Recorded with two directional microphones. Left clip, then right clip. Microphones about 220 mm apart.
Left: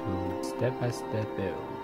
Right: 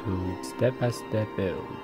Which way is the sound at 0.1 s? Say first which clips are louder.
Even; 20° right (ahead or behind).